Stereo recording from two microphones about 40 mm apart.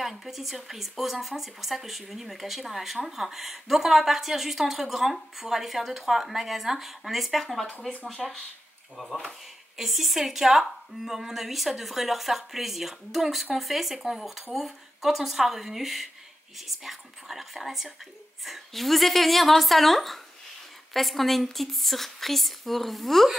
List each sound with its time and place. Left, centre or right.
0.1 s speech: centre